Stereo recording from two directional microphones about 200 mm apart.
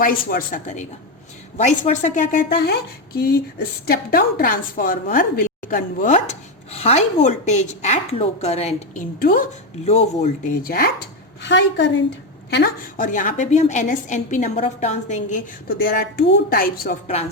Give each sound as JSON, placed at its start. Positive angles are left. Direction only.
{"t": 0.0, "sound": "a woman's voice", "side_deg": 45}
{"t": 3.8, "sound": "a woman's voice", "side_deg": 50}
{"t": 9.1, "sound": "speech", "side_deg": 50}
{"t": 9.8, "sound": "a woman's voice", "side_deg": 30}
{"t": 10.6, "sound": "speech", "side_deg": 45}
{"t": 11.4, "sound": "a woman's voice", "side_deg": 60}
{"t": 13.0, "sound": "a woman's voice", "side_deg": 40}
{"t": 15.8, "sound": "speech", "side_deg": 50}